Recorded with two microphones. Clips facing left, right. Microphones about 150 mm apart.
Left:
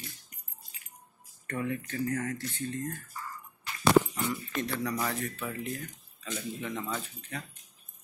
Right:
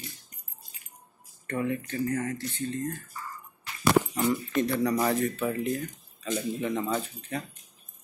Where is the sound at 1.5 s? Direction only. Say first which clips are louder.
Right 4 dB; 20° right (ahead or behind).